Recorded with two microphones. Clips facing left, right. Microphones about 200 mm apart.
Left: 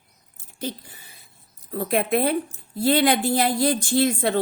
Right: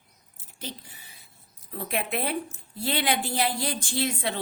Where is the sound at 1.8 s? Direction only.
45° left (ahead or behind).